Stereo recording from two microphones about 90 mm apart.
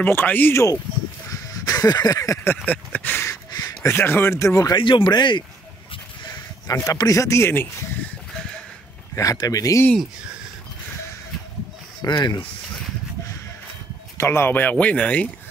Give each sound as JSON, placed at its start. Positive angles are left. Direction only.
{"t": 0.0, "sound": "speech", "side_deg": 20}
{"t": 1.3, "sound": "a sound", "side_deg": 40}
{"t": 2.4, "sound": "speech", "side_deg": 20}
{"t": 3.5, "sound": "a sound", "side_deg": 40}
{"t": 3.9, "sound": "speech", "side_deg": 25}
{"t": 4.7, "sound": "speech", "side_deg": 65}
{"t": 6.2, "sound": "a sound", "side_deg": 50}
{"t": 6.8, "sound": "speech", "side_deg": 40}
{"t": 9.1, "sound": "speech", "side_deg": 40}
{"t": 12.0, "sound": "speech", "side_deg": 45}
{"t": 14.1, "sound": "speech", "side_deg": 30}